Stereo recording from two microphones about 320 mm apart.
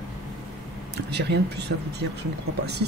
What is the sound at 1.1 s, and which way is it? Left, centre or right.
Speech, right.